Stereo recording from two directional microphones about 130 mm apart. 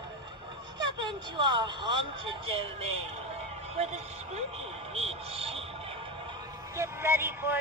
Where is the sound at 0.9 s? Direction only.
35° right (ahead or behind).